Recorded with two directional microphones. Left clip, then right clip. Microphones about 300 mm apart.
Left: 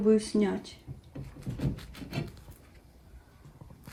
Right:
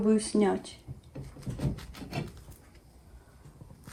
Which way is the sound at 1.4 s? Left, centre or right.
Centre.